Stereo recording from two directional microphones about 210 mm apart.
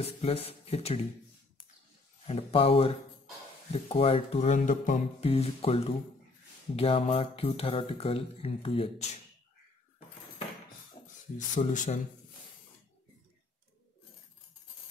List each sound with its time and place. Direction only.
0.0 s speech: 30° left (ahead or behind)
2.2 s speech: 30° left (ahead or behind)
11.0 s a sound: 25° left (ahead or behind)
11.5 s speech: 35° left (ahead or behind)